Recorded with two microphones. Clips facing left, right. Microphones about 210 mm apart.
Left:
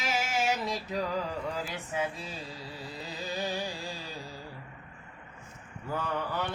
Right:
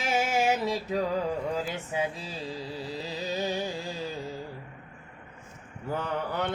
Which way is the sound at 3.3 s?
20° right (ahead or behind).